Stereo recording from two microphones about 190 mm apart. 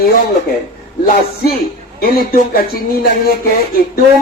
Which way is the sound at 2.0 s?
50° left (ahead or behind).